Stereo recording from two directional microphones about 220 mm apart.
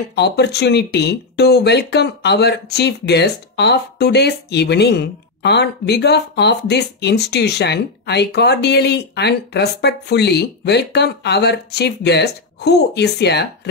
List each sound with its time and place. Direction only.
0.1 s speech: 50° left (ahead or behind)